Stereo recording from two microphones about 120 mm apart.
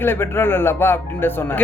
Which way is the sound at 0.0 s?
20° left (ahead or behind).